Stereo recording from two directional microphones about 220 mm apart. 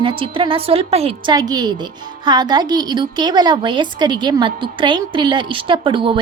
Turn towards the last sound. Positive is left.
turn(degrees=-20)  # may be behind; listen again after turning